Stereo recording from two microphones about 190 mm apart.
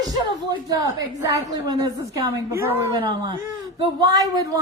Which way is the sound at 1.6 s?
20° right (ahead or behind).